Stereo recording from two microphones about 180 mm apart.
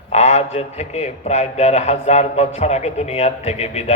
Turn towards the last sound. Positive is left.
turn(degrees=35)  # may be behind; listen again after turning